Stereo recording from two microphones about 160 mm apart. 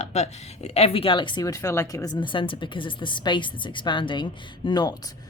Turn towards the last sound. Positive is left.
turn(degrees=25)  # may be behind; listen again after turning